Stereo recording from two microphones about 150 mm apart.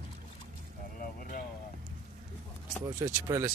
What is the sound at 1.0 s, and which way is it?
Vehicle, 70° left (ahead or behind).